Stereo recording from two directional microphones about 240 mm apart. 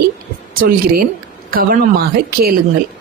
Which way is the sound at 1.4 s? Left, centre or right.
Right.